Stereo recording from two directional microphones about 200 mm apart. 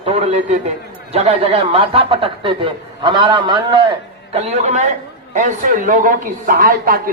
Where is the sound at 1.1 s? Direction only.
30° right (ahead or behind).